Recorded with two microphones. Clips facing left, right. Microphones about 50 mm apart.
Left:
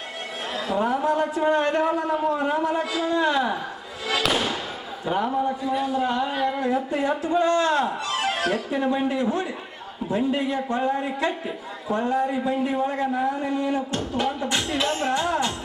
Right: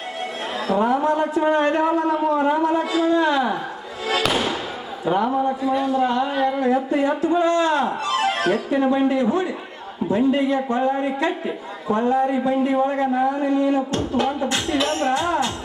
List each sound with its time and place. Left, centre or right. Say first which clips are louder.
0.5 s a man's voice: right 4 dB; centre
4.0 s fireworks: right 2 dB; centre
5.0 s a man's voice: right 4 dB; centre
8.1 s music: right 6 dB; centre
8.4 s a man's voice: right 4 dB; centre